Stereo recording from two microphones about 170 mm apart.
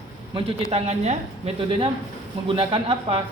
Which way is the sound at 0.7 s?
40° right (ahead or behind).